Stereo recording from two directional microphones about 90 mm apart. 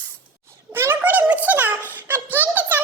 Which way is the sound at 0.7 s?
25° right (ahead or behind).